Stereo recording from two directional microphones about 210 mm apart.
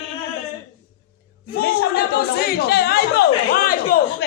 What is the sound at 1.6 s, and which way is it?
Speech, 50° left (ahead or behind).